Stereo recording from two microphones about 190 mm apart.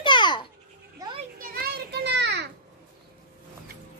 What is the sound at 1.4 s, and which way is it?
Children playing, 55° right (ahead or behind).